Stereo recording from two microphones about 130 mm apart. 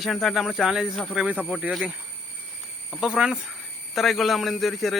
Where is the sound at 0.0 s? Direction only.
Centre (ahead or behind).